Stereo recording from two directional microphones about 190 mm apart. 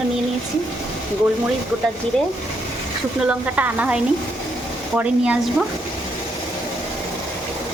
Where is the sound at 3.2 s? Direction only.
10° right (ahead or behind).